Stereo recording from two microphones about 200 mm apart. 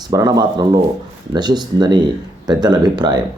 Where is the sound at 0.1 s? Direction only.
20° right (ahead or behind).